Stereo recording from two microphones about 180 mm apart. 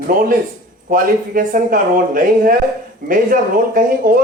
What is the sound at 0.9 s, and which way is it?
Speech, 50° right (ahead or behind).